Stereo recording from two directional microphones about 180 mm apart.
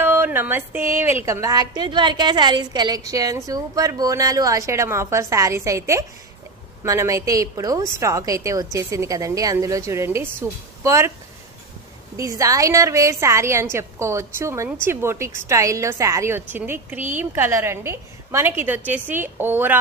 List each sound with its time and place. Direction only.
0.0 s a woman's voice: 10° right (ahead or behind)
12.2 s a woman's voice: 20° right (ahead or behind)